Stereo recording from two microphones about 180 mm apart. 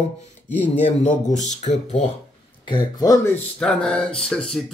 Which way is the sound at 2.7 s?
20° left (ahead or behind).